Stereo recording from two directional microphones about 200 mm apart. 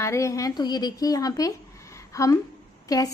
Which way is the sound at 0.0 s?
15° left (ahead or behind).